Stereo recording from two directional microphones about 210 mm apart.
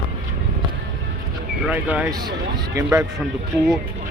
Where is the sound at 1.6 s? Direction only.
5° right (ahead or behind).